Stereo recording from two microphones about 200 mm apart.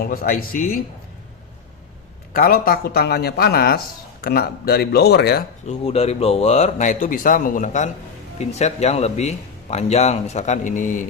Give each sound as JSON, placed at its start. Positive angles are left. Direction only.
{"t": 0.0, "sound": "speech", "side_deg": 45}
{"t": 2.3, "sound": "speech", "side_deg": 45}
{"t": 5.6, "sound": "speech", "side_deg": 30}